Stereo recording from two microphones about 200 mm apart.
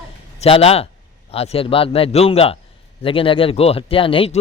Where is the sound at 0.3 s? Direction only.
30° left (ahead or behind).